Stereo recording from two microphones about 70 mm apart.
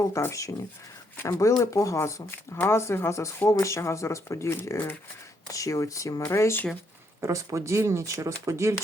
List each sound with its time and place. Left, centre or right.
0.1 s speech: left
5.5 s speech: left
6.2 s speech: left
7.2 s speech: right